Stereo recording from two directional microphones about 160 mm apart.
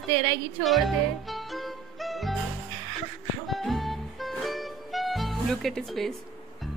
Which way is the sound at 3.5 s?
Centre (ahead or behind).